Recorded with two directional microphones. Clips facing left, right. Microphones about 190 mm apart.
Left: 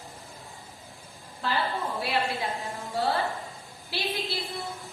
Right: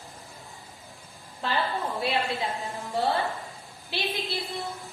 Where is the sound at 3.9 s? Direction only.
20° right (ahead or behind).